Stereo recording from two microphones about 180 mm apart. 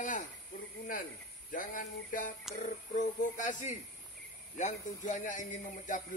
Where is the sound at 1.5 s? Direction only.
50° left (ahead or behind).